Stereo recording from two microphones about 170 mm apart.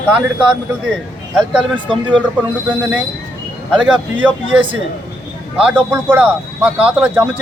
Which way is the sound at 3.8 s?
Centre (ahead or behind).